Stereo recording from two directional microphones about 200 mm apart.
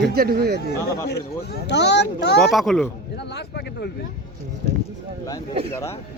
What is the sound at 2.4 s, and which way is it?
Speech, centre (ahead or behind).